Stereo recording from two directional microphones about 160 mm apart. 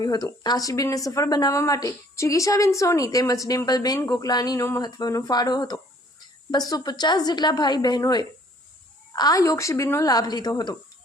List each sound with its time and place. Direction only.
0.0 s a woman's voice: 25° left (ahead or behind)